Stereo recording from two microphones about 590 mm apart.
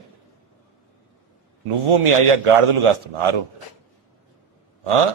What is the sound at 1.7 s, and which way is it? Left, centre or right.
A man's voice, right.